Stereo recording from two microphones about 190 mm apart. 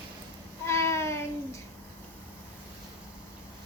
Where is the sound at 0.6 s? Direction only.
15° left (ahead or behind).